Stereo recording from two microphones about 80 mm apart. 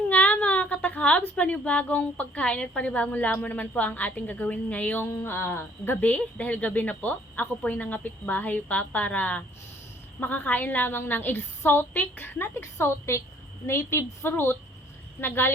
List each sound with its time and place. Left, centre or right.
0.1 s a woman's voice: centre
5.2 s a woman's voice: left